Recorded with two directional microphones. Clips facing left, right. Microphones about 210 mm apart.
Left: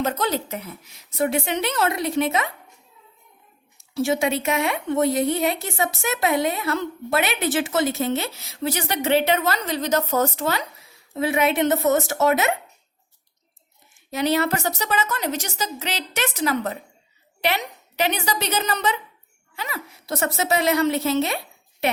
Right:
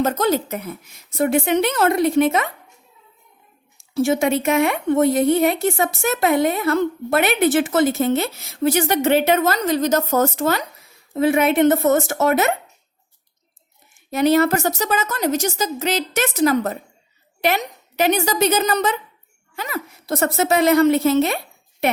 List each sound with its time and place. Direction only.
0.0 s a woman's voice: 45° right (ahead or behind)
3.9 s a woman's voice: 50° right (ahead or behind)
14.1 s a woman's voice: 50° right (ahead or behind)